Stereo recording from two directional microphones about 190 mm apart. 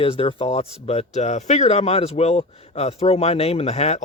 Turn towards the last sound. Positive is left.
turn(degrees=35)  # may be behind; listen again after turning